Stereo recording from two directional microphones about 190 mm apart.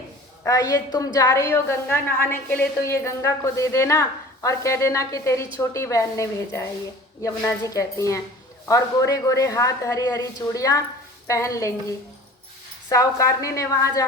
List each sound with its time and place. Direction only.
0.4 s a woman's voice: 15° left (ahead or behind)